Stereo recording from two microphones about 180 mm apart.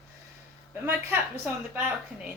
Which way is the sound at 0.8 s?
10° right (ahead or behind).